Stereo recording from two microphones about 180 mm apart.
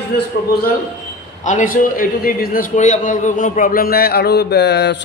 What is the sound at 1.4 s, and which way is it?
A man's voice, 45° left (ahead or behind).